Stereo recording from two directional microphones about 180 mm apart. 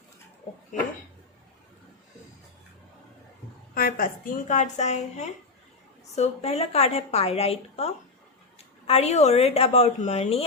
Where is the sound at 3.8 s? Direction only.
55° left (ahead or behind).